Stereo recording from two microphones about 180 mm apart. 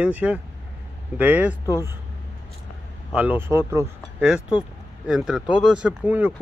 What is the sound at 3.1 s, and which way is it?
Speech, 10° right (ahead or behind).